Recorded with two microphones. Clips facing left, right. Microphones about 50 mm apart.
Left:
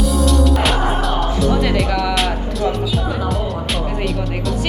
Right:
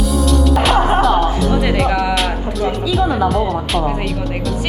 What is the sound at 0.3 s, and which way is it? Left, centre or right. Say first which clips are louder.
Music: right 4 dB; centre.